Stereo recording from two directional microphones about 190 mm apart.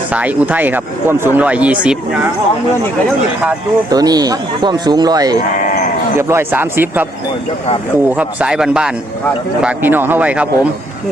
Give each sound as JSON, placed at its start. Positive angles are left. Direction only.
{"t": 0.1, "sound": "speech", "side_deg": -10}
{"t": 3.8, "sound": "speech", "side_deg": -20}
{"t": 8.1, "sound": "speech", "side_deg": -5}